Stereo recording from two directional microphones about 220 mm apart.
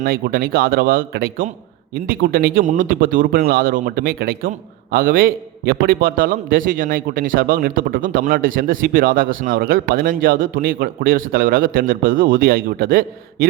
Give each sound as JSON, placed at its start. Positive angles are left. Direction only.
{"t": 0.0, "sound": "speech", "side_deg": -40}